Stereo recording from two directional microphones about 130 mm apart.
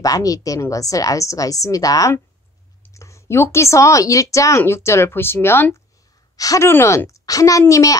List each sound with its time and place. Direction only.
0.0 s speech: 25° left (ahead or behind)